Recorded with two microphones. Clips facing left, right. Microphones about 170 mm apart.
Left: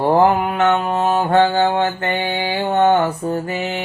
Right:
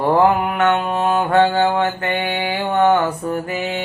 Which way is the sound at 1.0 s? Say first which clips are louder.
Even; 35° left (ahead or behind).